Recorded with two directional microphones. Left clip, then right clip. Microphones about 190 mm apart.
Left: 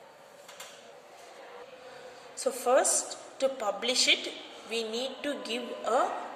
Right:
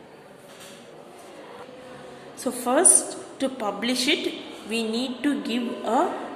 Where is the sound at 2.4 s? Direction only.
25° left (ahead or behind).